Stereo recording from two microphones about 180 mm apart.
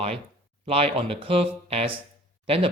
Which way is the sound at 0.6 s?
35° right (ahead or behind).